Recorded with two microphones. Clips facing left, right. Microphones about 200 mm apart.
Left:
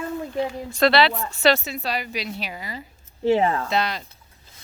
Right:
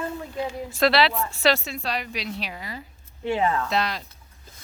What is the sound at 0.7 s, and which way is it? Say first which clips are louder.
Speech: left 2 dB; centre (ahead or behind).